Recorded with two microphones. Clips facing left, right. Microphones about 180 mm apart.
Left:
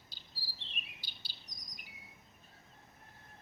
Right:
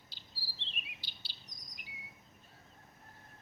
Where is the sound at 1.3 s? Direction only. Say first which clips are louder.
Even; 45° left (ahead or behind).